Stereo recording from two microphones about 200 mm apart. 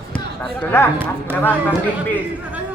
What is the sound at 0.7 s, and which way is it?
Speech, 15° left (ahead or behind).